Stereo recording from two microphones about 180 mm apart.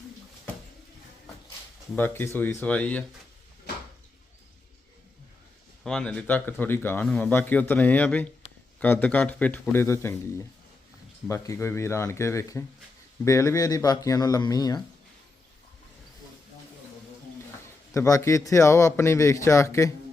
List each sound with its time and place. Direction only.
2.0 s speech: 10° left (ahead or behind)
5.8 s speech: 5° left (ahead or behind)
11.3 s speech: 15° left (ahead or behind)
17.9 s speech: 15° left (ahead or behind)